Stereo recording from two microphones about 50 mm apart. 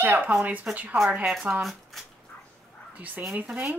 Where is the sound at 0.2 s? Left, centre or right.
Right.